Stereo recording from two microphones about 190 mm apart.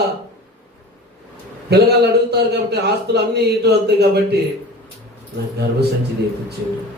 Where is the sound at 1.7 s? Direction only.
60° right (ahead or behind).